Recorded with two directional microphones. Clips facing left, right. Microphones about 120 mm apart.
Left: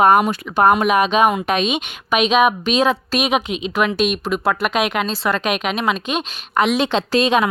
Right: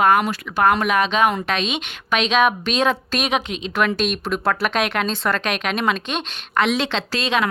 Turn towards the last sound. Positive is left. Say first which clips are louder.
# left 6 dB
turn(degrees=15)  # may be behind; listen again after turning